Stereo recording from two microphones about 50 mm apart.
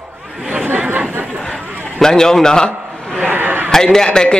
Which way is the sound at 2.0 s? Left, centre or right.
Centre.